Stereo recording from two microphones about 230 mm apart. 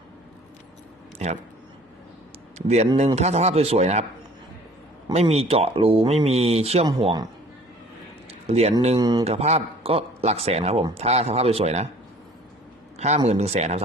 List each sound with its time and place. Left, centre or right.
2.6 s a man's voice: right
5.1 s a man's voice: right
8.3 s a man's voice: right
13.0 s a man's voice: right